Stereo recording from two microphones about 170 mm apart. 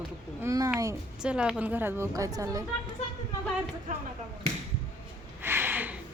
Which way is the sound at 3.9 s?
50° right (ahead or behind).